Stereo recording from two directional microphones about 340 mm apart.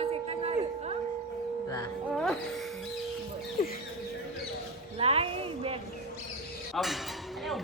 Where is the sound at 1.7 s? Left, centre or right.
Centre.